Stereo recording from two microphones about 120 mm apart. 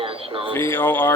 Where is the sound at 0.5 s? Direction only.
15° left (ahead or behind).